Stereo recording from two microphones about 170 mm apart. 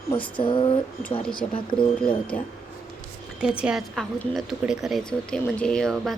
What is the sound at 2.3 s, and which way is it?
Speech, 10° left (ahead or behind).